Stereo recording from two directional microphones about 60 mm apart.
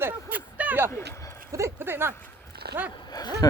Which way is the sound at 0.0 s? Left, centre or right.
Right.